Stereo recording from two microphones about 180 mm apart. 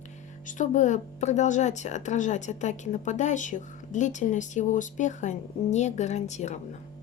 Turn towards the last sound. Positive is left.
turn(degrees=40)  # may be behind; listen again after turning